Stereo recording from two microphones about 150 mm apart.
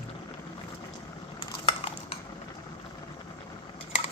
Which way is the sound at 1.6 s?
40° left (ahead or behind).